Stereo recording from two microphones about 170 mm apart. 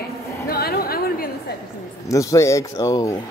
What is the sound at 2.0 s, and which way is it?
Speech, 15° left (ahead or behind).